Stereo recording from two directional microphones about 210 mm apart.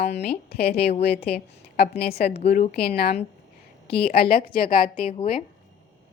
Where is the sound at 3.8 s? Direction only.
45° left (ahead or behind).